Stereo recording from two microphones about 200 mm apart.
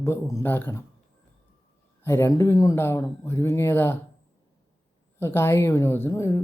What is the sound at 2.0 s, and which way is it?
Speech, 15° left (ahead or behind).